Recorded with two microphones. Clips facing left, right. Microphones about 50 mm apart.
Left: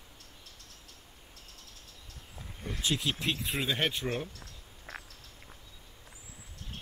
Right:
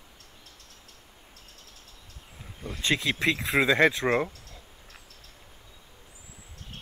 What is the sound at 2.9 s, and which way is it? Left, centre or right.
Speech, right.